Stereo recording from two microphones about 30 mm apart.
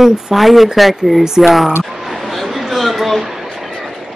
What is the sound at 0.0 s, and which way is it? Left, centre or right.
Speech, centre.